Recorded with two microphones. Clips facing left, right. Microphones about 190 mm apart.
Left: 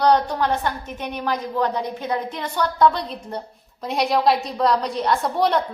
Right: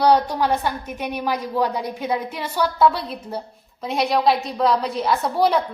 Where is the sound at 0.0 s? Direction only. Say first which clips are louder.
Right 1 dB; 10° right (ahead or behind).